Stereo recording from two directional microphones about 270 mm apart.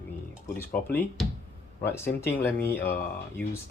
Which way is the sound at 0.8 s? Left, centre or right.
Centre.